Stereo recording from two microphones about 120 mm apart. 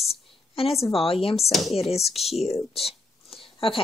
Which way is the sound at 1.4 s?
Centre (ahead or behind).